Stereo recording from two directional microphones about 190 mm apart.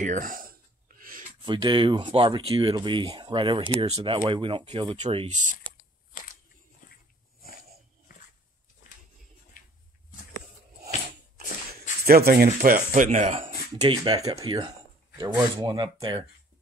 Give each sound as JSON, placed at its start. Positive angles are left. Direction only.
{"t": 0.0, "sound": "a sound", "side_deg": -45}
{"t": 1.4, "sound": "speech", "side_deg": -25}
{"t": 4.9, "sound": "speech", "side_deg": -35}
{"t": 6.8, "sound": "dog", "side_deg": 45}
{"t": 9.6, "sound": "a sound", "side_deg": 45}
{"t": 12.0, "sound": "speech", "side_deg": -55}